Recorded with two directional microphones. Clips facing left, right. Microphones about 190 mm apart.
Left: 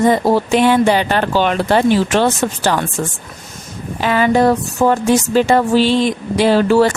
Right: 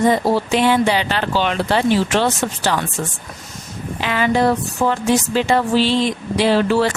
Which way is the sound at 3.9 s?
45° left (ahead or behind).